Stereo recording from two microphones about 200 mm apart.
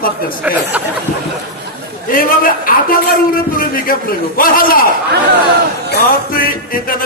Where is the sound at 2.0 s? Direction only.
45° left (ahead or behind).